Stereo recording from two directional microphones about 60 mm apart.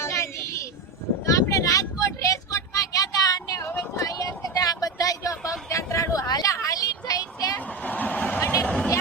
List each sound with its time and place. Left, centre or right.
0.0 s a sound: left
1.2 s vehicle: left
3.9 s a sound: left
5.5 s vehicle: left
7.8 s vehicle: left
8.4 s vehicle: left
8.6 s vehicle: centre